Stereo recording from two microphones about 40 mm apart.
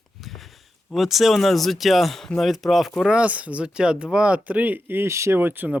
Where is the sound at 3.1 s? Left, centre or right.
Right.